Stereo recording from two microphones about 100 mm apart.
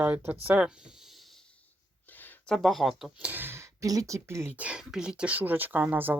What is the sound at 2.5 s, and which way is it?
Speech, centre (ahead or behind).